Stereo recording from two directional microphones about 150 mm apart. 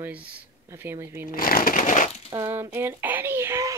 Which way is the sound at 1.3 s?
75° left (ahead or behind).